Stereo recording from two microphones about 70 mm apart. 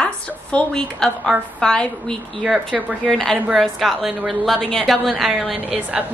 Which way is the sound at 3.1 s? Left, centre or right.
Centre.